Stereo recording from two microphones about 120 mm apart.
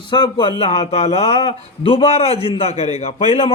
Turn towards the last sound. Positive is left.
turn(degrees=55)  # may be behind; listen again after turning